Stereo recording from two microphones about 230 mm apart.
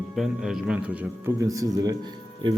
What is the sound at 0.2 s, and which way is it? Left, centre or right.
A man's voice, centre.